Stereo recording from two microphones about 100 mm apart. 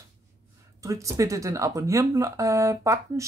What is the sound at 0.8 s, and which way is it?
Speech, 35° right (ahead or behind).